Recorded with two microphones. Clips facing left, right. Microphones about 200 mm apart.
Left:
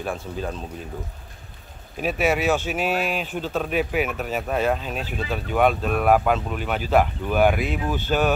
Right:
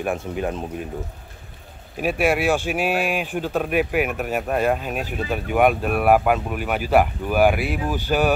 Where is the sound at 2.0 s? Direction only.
10° right (ahead or behind).